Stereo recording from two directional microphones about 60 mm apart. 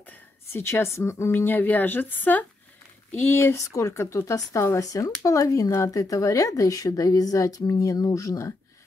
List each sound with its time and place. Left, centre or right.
0.5 s a woman's voice: left
3.5 s speech: left